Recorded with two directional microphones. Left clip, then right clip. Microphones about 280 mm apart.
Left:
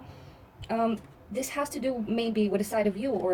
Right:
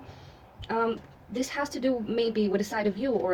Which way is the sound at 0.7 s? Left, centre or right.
Centre.